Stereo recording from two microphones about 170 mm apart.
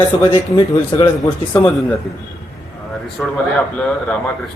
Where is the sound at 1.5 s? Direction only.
10° left (ahead or behind).